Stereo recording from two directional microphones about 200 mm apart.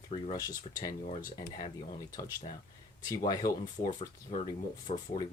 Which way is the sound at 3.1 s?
20° left (ahead or behind).